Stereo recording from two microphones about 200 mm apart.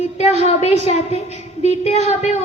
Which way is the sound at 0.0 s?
30° left (ahead or behind).